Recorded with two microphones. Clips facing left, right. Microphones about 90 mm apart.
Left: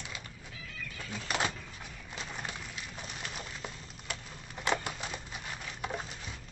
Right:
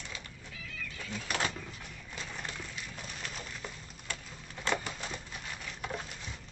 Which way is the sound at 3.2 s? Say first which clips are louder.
Left 1 dB; 15° left (ahead or behind).